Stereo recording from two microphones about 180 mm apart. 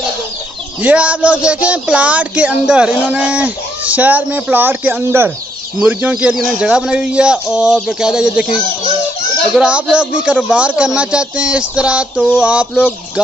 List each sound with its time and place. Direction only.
0.8 s speech: 10° right (ahead or behind)
9.6 s speech: 5° right (ahead or behind)